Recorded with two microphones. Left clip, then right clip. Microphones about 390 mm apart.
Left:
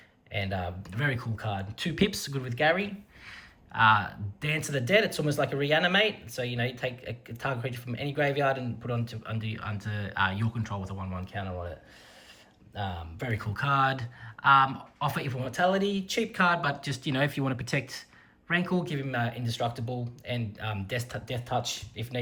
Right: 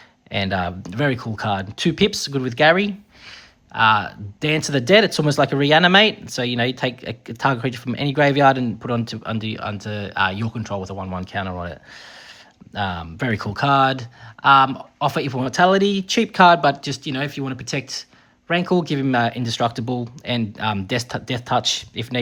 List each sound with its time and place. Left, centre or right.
0.3 s speech: centre
12.8 s speech: centre